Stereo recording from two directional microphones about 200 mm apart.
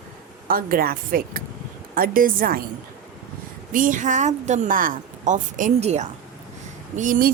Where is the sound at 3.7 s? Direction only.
40° right (ahead or behind).